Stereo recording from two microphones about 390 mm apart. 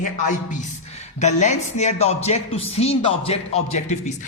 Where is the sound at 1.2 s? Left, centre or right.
Centre.